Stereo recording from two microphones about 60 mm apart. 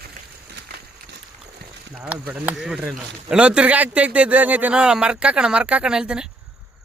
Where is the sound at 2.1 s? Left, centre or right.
Right.